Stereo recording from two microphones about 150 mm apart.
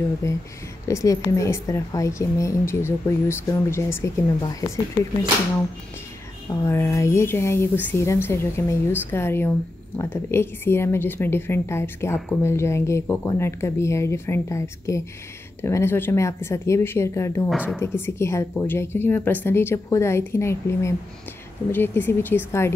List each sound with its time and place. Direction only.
0.8 s a woman's voice: 20° left (ahead or behind)
6.5 s a woman's voice: 20° left (ahead or behind)
17.5 s a woman's voice: centre (ahead or behind)
17.7 s a woman's voice: 15° left (ahead or behind)